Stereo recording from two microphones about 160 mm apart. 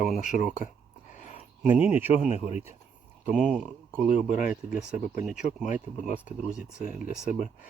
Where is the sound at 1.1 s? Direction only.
50° left (ahead or behind).